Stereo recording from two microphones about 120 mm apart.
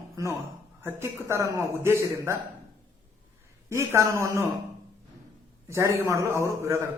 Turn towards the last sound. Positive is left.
turn(degrees=-25)  # may be behind; listen again after turning